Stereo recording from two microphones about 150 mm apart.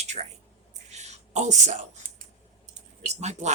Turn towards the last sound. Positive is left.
turn(degrees=-50)  # may be behind; listen again after turning